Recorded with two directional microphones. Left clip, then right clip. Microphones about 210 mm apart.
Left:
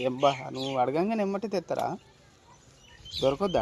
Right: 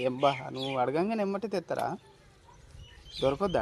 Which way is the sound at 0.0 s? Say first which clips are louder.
Left 2 dB; centre (ahead or behind).